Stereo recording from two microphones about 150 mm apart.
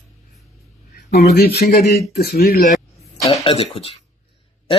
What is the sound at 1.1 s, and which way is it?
Speech, 90° left.